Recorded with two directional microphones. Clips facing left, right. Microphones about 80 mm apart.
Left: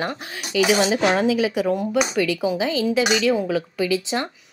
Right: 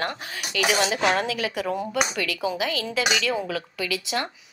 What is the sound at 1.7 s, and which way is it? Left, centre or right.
Speech, centre.